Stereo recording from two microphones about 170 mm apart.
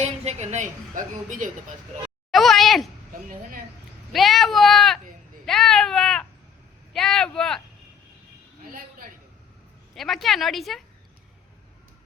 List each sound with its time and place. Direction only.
0.0 s a woman's voice: 40° right (ahead or behind)
2.3 s a sound: centre (ahead or behind)
4.1 s speech: centre (ahead or behind)
8.6 s a woman's voice: 55° right (ahead or behind)
9.9 s speech: centre (ahead or behind)